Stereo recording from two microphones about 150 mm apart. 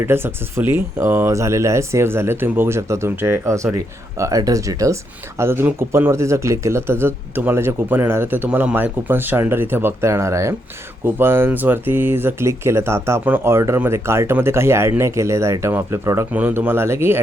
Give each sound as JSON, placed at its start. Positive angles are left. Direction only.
{"t": 0.0, "sound": "speech", "side_deg": -15}